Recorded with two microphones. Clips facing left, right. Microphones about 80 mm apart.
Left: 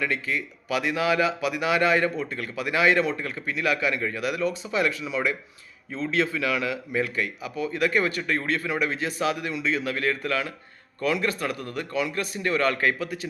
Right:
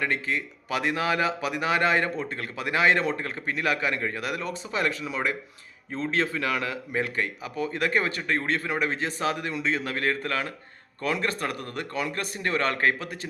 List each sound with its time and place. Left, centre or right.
0.0 s speech: right